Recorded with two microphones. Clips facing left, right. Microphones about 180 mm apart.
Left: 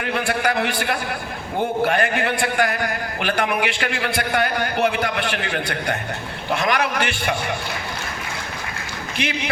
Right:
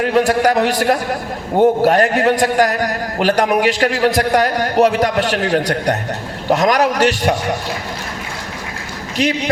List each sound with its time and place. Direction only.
0.0 s a man's voice: 40° right (ahead or behind)